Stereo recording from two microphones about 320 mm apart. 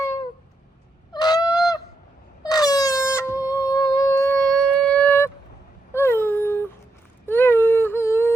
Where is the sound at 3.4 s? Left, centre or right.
Centre.